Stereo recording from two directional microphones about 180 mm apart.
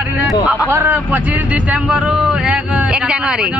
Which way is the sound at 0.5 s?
10° right (ahead or behind).